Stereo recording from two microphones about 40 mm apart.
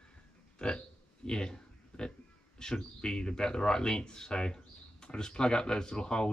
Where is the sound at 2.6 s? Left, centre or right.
Centre.